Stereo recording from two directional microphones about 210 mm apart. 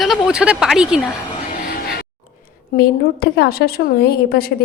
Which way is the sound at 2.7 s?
45° left (ahead or behind).